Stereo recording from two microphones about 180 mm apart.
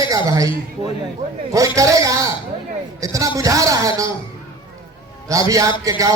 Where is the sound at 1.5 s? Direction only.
15° right (ahead or behind).